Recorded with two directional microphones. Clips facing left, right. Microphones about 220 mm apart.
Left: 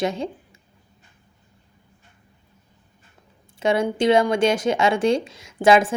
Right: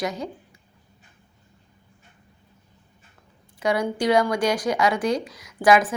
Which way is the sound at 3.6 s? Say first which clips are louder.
Left 3 dB; 25° left (ahead or behind).